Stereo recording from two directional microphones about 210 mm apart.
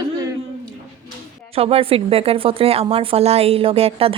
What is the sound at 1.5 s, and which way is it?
A woman's voice, 30° right (ahead or behind).